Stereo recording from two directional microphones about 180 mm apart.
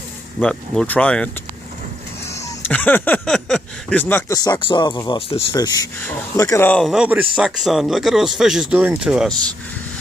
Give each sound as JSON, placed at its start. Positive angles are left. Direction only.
{"t": 0.4, "sound": "speech", "side_deg": 5}
{"t": 2.3, "sound": "speech", "side_deg": 10}
{"t": 6.8, "sound": "speech", "side_deg": -5}